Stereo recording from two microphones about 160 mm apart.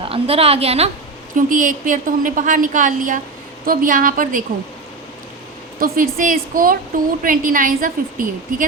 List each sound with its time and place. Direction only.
0.0 s a woman's voice: 35° right (ahead or behind)
1.4 s a woman's voice: 55° right (ahead or behind)
5.8 s a woman's voice: 60° right (ahead or behind)